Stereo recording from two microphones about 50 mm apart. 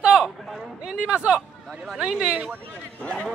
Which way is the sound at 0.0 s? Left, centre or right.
Right.